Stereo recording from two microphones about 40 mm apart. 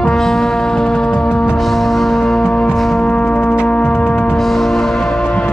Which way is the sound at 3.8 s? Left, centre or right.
Left.